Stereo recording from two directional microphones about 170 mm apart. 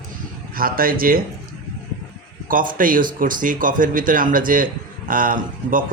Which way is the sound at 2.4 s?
55° right (ahead or behind).